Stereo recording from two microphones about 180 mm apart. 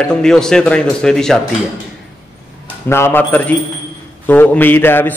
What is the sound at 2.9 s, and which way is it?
A man's voice, 15° left (ahead or behind).